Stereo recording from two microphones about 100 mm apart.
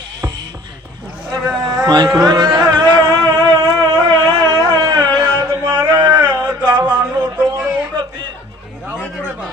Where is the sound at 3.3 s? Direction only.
40° right (ahead or behind).